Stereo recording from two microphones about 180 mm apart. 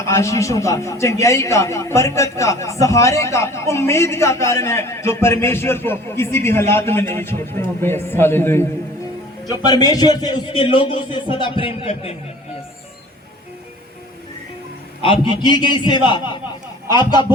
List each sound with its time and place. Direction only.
0.0 s a man's voice: 15° left (ahead or behind); by 12.1 s 30° left (ahead or behind)
15.0 s a man's voice: 30° left (ahead or behind)